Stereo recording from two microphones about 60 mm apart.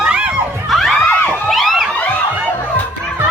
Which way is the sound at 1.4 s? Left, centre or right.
Centre.